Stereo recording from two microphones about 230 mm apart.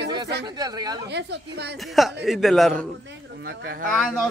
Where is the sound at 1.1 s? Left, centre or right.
Right.